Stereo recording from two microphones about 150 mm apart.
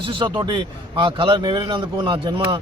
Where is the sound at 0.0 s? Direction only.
35° right (ahead or behind).